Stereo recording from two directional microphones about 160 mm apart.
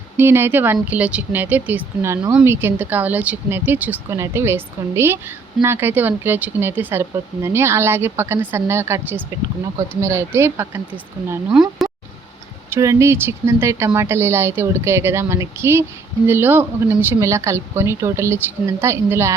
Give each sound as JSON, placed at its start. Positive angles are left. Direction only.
{"t": 0.2, "sound": "speech", "side_deg": -15}
{"t": 12.7, "sound": "speech", "side_deg": -20}